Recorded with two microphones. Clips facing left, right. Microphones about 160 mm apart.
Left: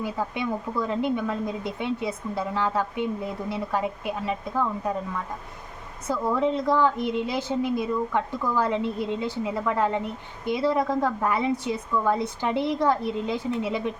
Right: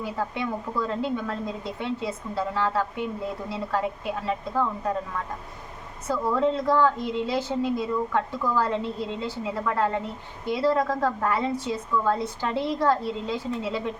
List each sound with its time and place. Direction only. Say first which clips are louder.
0.0 s a woman's voice: left 1 dB; 15° left (ahead or behind)
6.1 s a woman's voice: even; 15° left (ahead or behind)